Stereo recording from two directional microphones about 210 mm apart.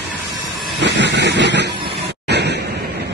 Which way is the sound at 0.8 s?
55° right (ahead or behind).